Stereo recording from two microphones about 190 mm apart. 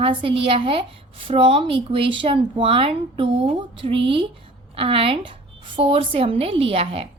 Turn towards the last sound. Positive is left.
turn(degrees=-30)  # may be behind; listen again after turning